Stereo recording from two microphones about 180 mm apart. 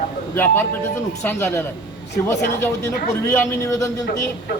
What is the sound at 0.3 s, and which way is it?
Speech, 10° left (ahead or behind).